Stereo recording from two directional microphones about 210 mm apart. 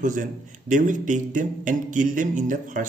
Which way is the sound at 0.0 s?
40° right (ahead or behind).